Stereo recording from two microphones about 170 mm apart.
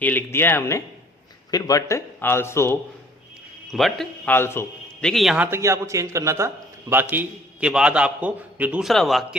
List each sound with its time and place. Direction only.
0.0 s speech: 10° left (ahead or behind)
3.7 s a man's voice: centre (ahead or behind)
4.4 s a man's voice: 15° left (ahead or behind)
5.0 s a man's voice: centre (ahead or behind)